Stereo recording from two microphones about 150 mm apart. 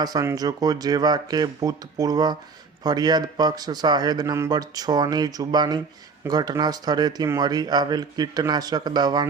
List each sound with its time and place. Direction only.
0.0 s speech: 25° right (ahead or behind)